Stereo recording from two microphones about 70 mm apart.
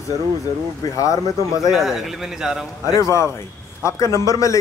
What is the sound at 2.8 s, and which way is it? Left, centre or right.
Speech, left.